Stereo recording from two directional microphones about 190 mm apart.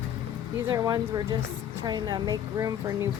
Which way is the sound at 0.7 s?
20° right (ahead or behind).